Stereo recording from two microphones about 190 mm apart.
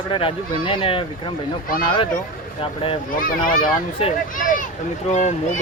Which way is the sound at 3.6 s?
30° left (ahead or behind).